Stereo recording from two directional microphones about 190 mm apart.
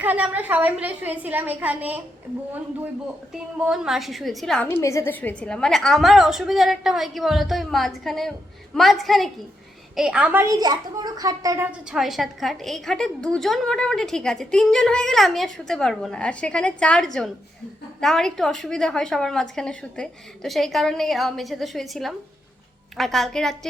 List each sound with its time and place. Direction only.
0.0 s a woman's voice: 10° right (ahead or behind)
3.7 s a woman's voice: centre (ahead or behind); by 11.7 s 20° right (ahead or behind)
11.9 s a woman's voice: centre (ahead or behind)